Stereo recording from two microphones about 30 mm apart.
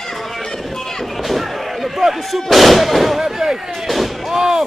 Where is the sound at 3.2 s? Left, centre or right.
Centre.